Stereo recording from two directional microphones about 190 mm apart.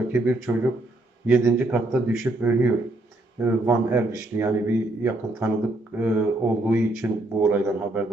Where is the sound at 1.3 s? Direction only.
15° right (ahead or behind).